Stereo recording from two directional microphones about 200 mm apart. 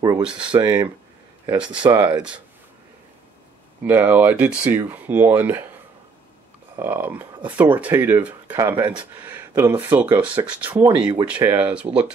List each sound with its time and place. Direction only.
0.2 s speech: 5° right (ahead or behind)
0.5 s speech: 15° right (ahead or behind)
1.9 s speech: 10° right (ahead or behind)
3.8 s speech: 10° right (ahead or behind)
6.8 s speech: 10° right (ahead or behind)